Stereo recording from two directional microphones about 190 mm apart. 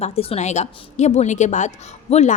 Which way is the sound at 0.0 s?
35° left (ahead or behind).